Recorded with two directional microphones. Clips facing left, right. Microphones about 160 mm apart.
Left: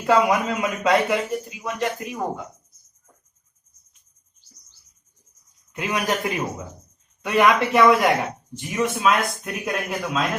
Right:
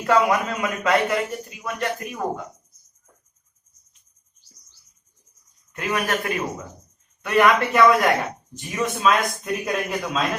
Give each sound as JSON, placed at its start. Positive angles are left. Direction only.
{"t": 0.0, "sound": "a man's voice", "side_deg": 15}
{"t": 5.7, "sound": "a man's voice", "side_deg": 15}